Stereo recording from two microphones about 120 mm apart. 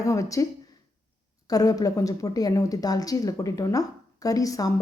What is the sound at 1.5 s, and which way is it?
Speech, 30° left (ahead or behind).